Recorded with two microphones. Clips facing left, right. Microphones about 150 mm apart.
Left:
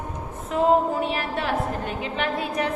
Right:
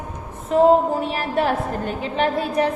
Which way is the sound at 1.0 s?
40° right (ahead or behind).